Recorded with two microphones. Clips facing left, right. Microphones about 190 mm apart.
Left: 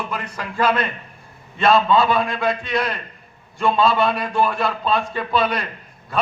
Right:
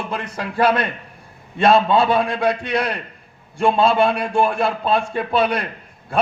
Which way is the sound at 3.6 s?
30° right (ahead or behind).